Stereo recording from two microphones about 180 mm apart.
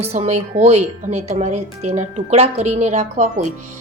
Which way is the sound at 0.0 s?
35° right (ahead or behind).